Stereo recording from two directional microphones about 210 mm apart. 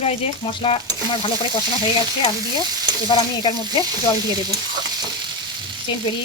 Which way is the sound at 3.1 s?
25° left (ahead or behind).